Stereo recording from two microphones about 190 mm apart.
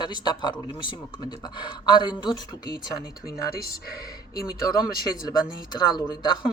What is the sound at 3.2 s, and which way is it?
Speech, 55° left (ahead or behind).